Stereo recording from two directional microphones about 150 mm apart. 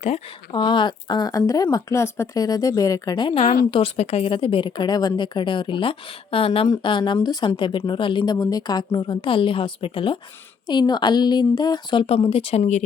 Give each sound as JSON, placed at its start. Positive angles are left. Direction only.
{"t": 0.0, "sound": "speech", "side_deg": 35}
{"t": 3.4, "sound": "a woman's voice", "side_deg": 65}
{"t": 3.7, "sound": "speech", "side_deg": 40}
{"t": 12.0, "sound": "speech", "side_deg": 40}